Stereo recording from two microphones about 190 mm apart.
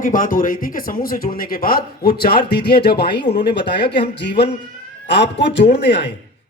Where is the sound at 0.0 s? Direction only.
45° left (ahead or behind).